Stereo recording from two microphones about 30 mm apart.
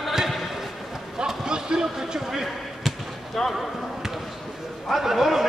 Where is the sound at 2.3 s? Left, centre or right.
Centre.